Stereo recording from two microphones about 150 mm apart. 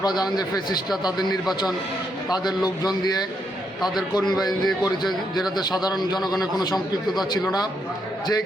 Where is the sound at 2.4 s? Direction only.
25° left (ahead or behind).